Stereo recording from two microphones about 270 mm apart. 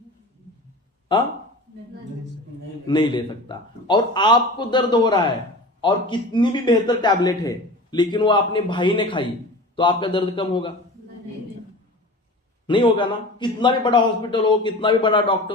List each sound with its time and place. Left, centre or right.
2.8 s a man's voice: centre
12.6 s a man's voice: centre